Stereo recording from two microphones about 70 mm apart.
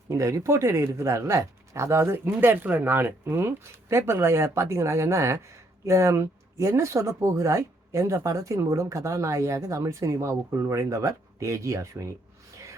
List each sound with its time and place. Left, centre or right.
0.1 s speech: right